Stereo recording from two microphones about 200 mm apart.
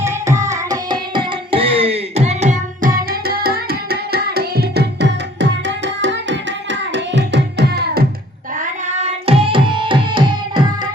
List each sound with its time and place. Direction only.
0.0 s carnatic music: 15° right (ahead or behind); by 8.0 s 55° right (ahead or behind)
9.0 s music: 30° right (ahead or behind)